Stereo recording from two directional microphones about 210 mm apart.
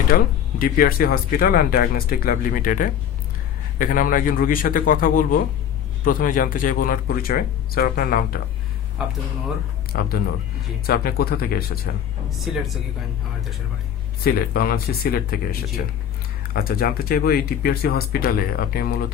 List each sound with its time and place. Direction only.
0.1 s a man's voice: 45° left (ahead or behind)
9.9 s speech: 45° left (ahead or behind)
12.3 s speech: centre (ahead or behind)
14.2 s speech: 45° left (ahead or behind)
16.5 s speech: 45° left (ahead or behind)